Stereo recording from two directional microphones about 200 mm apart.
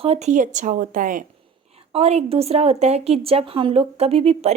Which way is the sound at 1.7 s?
30° right (ahead or behind).